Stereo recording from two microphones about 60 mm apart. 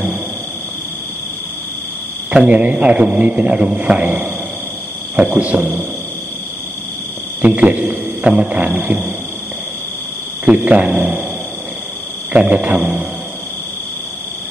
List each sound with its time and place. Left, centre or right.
2.3 s a man's voice: right
7.4 s a man's voice: right
10.4 s a man's voice: right
12.3 s a man's voice: right